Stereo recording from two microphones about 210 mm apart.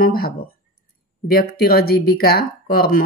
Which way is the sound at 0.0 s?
45° left (ahead or behind).